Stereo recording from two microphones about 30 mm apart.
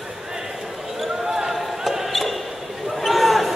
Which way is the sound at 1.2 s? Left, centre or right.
Centre.